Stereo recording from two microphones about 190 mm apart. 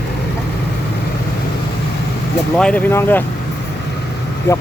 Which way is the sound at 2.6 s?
5° left (ahead or behind).